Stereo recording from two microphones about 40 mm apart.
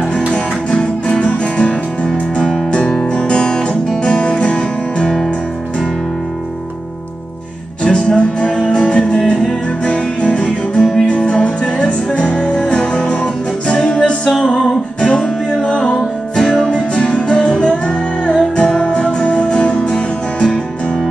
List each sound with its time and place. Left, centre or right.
0.3 s music: left
7.8 s music: left
16.0 s music: centre
16.9 s music: left